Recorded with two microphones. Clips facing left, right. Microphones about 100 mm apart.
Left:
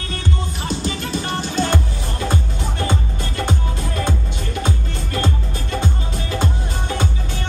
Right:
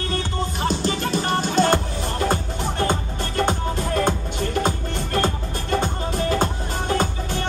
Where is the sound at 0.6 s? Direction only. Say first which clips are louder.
Right 2 dB; 45° right (ahead or behind).